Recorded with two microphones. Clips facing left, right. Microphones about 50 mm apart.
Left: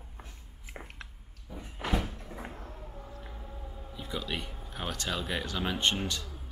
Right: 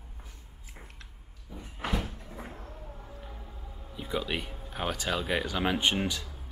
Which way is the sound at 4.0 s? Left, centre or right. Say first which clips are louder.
Right 4 dB; centre.